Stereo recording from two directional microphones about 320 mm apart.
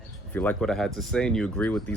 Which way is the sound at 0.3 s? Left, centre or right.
Centre.